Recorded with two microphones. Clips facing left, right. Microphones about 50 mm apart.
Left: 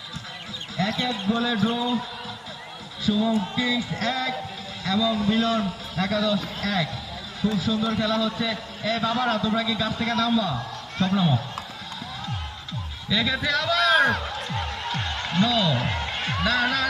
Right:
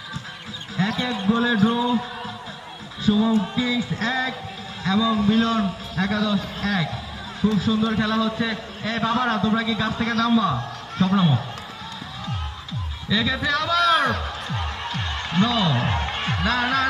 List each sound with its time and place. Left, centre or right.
0.8 s a man's voice: right
3.1 s a man's voice: centre
5.4 s a man's voice: centre
6.0 s a man's voice: centre
13.1 s speech: centre
14.6 s music: centre
16.2 s music: right